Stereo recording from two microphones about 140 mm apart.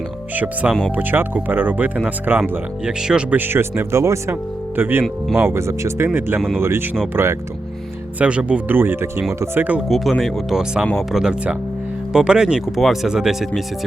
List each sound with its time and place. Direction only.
0.3 s speech: 10° right (ahead or behind)
9.9 s speech: centre (ahead or behind)